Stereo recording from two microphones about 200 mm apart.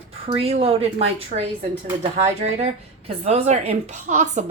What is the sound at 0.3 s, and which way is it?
Speech, 30° right (ahead or behind).